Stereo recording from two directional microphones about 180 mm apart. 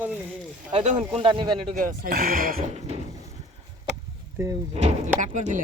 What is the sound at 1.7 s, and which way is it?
Speech, 55° right (ahead or behind).